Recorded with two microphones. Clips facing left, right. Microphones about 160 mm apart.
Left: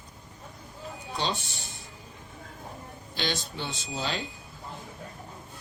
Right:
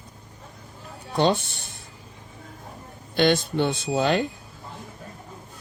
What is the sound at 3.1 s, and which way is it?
Speech, 55° right (ahead or behind).